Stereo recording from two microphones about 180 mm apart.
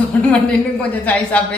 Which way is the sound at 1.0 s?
10° left (ahead or behind).